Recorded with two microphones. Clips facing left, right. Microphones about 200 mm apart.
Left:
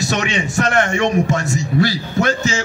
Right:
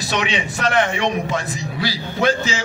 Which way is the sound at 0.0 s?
45° left (ahead or behind).